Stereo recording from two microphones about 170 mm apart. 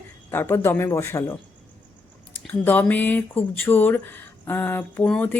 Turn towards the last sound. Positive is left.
turn(degrees=5)  # may be behind; listen again after turning